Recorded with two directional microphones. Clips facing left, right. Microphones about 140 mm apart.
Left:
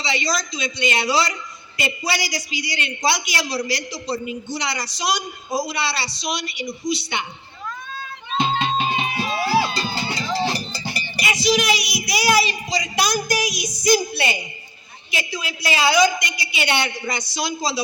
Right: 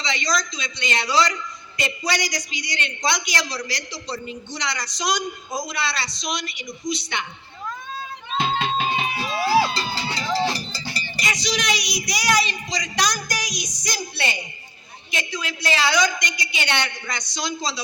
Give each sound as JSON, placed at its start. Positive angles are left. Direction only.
{"t": 0.0, "sound": "a woman's voice", "side_deg": 5}
{"t": 8.4, "sound": "music", "side_deg": 0}
{"t": 9.3, "sound": "music", "side_deg": 15}
{"t": 10.7, "sound": "cowbell", "side_deg": 20}
{"t": 11.2, "sound": "a woman's voice", "side_deg": 10}